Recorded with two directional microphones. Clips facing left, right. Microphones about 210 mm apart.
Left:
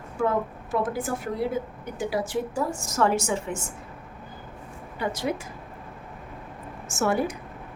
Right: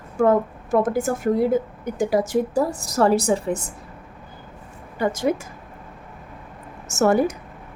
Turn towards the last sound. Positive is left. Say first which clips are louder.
# right 6 dB
turn(degrees=-45)  # may be behind; listen again after turning